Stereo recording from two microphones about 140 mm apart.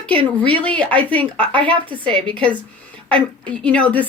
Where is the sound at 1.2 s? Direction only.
40° right (ahead or behind).